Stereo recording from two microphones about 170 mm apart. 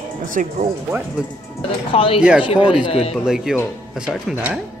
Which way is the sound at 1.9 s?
30° left (ahead or behind).